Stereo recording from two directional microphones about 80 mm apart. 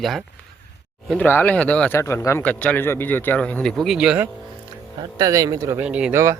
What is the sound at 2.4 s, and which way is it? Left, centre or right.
A man's voice, centre.